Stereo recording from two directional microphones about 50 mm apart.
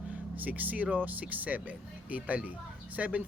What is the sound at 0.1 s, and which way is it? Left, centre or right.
Speech, right.